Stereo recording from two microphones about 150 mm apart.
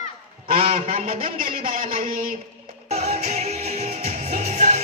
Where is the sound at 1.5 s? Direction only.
70° right (ahead or behind).